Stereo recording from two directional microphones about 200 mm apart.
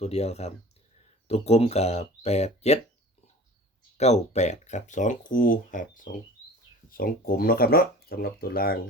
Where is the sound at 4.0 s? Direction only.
35° left (ahead or behind).